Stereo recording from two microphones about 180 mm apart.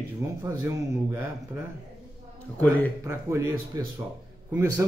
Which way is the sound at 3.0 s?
15° right (ahead or behind).